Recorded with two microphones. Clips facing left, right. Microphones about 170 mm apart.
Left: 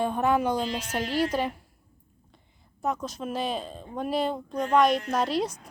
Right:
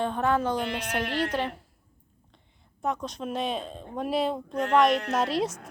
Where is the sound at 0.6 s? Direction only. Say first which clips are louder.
Even; 60° right (ahead or behind).